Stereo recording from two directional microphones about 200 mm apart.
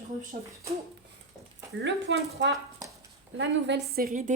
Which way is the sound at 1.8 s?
60° right (ahead or behind).